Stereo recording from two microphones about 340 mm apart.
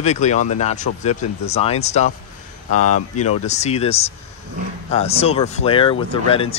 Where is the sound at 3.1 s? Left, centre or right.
Centre.